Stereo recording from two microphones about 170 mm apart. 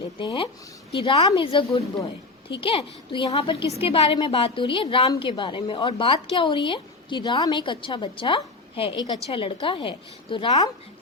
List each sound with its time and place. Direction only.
0.2 s a woman's voice: 30° left (ahead or behind)